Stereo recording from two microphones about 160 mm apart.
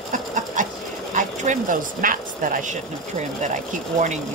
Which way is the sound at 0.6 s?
55° right (ahead or behind).